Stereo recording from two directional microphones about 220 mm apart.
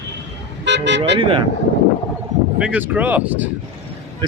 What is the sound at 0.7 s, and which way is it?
Speech, 50° right (ahead or behind).